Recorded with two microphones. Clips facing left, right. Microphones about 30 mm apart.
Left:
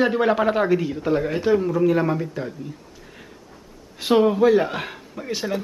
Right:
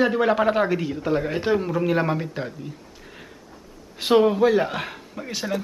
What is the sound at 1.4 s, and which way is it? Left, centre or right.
Speech, centre.